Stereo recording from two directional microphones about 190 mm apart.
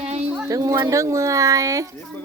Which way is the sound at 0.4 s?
15° right (ahead or behind).